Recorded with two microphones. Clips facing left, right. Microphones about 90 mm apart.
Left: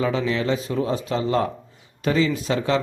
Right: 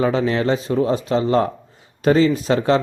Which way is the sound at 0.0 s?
40° right (ahead or behind).